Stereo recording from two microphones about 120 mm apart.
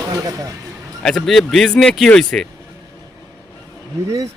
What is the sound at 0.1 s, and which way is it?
Speech, 30° right (ahead or behind).